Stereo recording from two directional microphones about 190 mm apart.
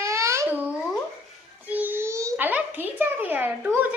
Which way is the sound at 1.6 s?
10° right (ahead or behind).